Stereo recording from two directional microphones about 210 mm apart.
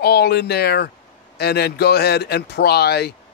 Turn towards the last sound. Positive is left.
turn(degrees=50)  # may be behind; listen again after turning